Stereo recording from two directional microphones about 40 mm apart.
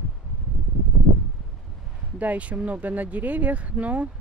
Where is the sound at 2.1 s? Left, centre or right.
Right.